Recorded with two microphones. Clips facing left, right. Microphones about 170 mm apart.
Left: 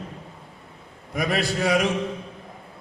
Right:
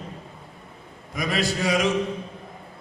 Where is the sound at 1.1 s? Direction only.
60° left (ahead or behind).